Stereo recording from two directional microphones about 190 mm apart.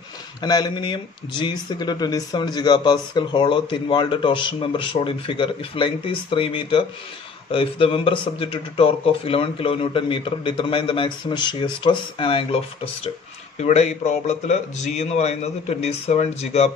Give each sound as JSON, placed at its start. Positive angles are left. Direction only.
{"t": 0.4, "sound": "speech", "side_deg": 20}
{"t": 13.6, "sound": "a man's voice", "side_deg": 35}